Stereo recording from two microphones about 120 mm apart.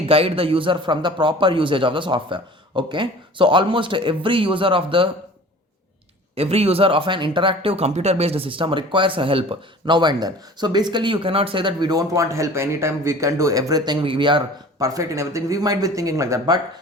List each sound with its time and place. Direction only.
0.1 s speech: 50° right (ahead or behind)
6.3 s speech: 55° right (ahead or behind)
14.8 s speech: 25° right (ahead or behind)